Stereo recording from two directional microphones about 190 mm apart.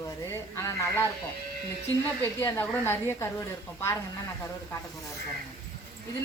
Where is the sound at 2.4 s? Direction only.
10° left (ahead or behind).